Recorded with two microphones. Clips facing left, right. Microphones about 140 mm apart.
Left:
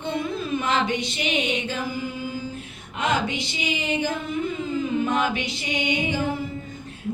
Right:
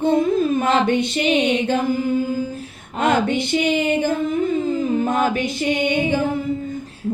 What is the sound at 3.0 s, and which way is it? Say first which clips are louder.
Speech: right 6 dB; 55° right (ahead or behind).